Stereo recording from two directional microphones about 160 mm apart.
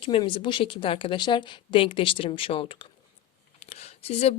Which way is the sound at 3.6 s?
40° left (ahead or behind).